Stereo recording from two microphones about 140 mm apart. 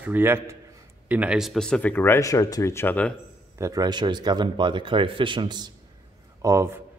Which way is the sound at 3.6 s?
25° right (ahead or behind).